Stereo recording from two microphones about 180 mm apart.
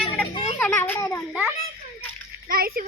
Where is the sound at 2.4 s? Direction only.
55° right (ahead or behind).